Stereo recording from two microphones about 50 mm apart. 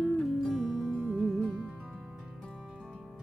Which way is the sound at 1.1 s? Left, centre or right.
Centre.